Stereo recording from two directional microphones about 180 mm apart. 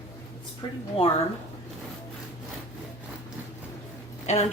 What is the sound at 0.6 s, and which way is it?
Speech, 25° left (ahead or behind).